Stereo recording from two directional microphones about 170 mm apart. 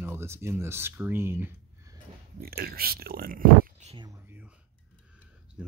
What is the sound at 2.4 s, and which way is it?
Speech, 65° right (ahead or behind).